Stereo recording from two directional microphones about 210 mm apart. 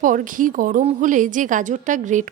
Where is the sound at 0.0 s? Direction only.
40° right (ahead or behind).